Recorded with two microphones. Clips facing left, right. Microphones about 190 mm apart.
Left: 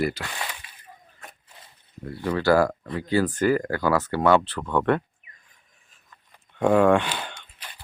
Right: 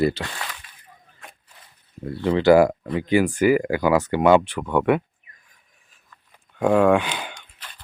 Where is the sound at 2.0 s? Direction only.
25° right (ahead or behind).